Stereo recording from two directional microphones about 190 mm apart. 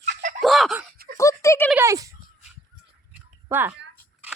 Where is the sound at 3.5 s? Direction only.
10° right (ahead or behind).